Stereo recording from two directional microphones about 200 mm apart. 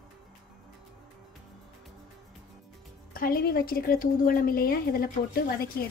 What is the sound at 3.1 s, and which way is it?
A woman's voice, 45° left (ahead or behind).